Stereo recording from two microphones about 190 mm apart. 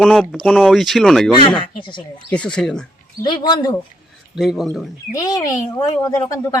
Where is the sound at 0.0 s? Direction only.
Centre (ahead or behind).